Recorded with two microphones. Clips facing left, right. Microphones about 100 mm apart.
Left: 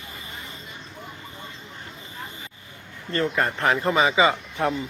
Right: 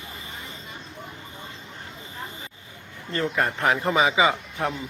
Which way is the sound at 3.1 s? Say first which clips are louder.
Left 1 dB; 5° right (ahead or behind).